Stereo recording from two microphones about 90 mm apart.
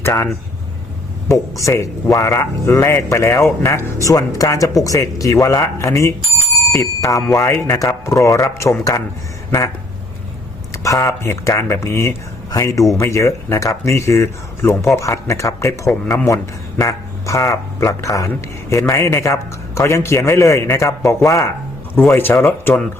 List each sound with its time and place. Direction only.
0.0 s speech: 30° left (ahead or behind)
1.3 s a man's voice: 35° left (ahead or behind)
10.7 s a man's voice: 35° left (ahead or behind)